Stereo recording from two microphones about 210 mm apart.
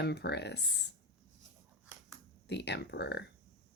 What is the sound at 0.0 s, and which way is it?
Speech, 55° left (ahead or behind).